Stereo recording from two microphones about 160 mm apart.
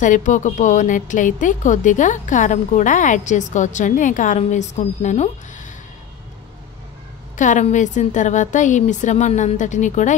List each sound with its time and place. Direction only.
0.0 s speech: 50° left (ahead or behind)
7.3 s speech: 50° left (ahead or behind)